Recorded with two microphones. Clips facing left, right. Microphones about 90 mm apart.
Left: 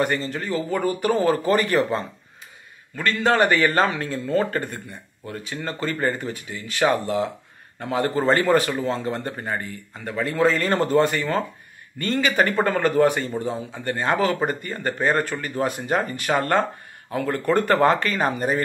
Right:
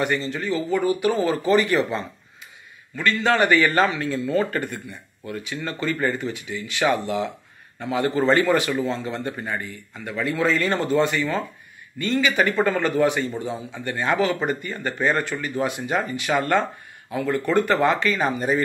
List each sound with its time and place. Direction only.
0.0 s speech: 40° left (ahead or behind)